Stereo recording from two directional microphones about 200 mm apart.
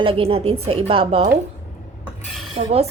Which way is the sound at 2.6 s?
30° right (ahead or behind).